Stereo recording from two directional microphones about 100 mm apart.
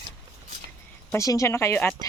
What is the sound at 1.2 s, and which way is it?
Speech, 35° left (ahead or behind).